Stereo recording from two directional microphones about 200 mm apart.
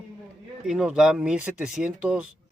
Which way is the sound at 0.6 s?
5° right (ahead or behind).